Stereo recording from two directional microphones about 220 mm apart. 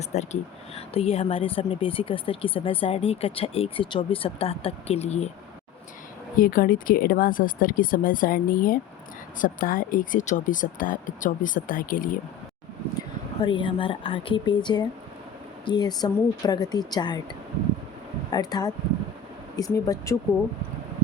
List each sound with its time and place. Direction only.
0.0 s speech: 30° left (ahead or behind)
6.4 s speech: 40° left (ahead or behind)
13.4 s speech: 20° left (ahead or behind)
18.3 s speech: 20° left (ahead or behind)